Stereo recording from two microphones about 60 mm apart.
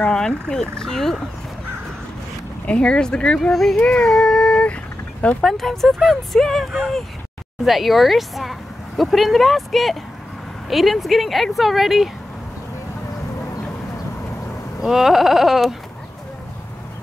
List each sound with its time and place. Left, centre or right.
0.0 s fowl: centre
0.5 s speech: centre
2.6 s speech: centre
14.8 s speech: centre